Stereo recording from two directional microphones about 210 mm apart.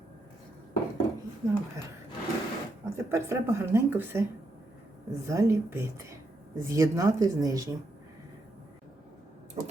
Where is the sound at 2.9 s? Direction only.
15° right (ahead or behind).